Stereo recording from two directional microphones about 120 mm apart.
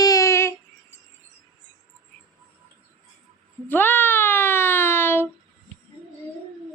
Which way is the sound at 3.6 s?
15° left (ahead or behind).